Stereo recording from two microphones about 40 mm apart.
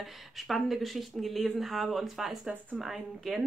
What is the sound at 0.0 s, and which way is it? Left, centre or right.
Speech, centre.